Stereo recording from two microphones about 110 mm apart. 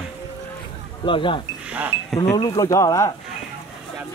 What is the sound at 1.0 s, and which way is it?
Speech, 50° left (ahead or behind).